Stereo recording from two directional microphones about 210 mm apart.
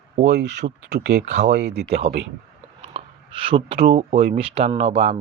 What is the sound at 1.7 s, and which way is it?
Speech, 30° right (ahead or behind).